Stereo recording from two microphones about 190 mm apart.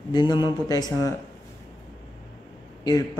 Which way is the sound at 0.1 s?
20° left (ahead or behind).